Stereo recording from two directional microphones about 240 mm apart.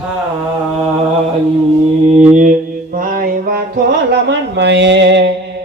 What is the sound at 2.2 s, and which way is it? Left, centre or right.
Mantra, right.